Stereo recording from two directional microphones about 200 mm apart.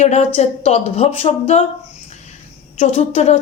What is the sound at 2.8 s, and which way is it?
Speech, 35° left (ahead or behind).